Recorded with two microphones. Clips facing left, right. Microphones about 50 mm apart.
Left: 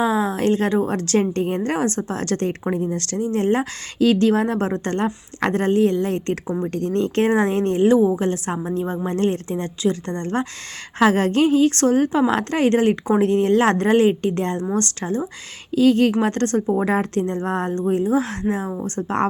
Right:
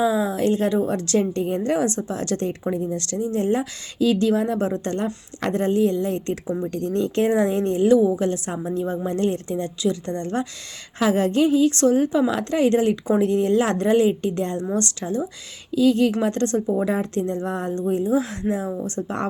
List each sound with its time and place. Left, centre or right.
0.0 s speech: left
7.9 s a woman's voice: left
11.0 s speech: left